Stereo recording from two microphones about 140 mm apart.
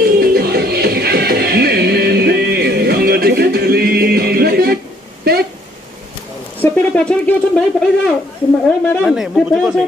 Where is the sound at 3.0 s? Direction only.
90° right.